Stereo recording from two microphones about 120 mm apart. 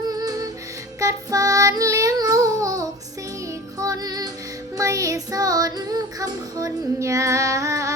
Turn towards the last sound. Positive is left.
turn(degrees=-30)  # may be behind; listen again after turning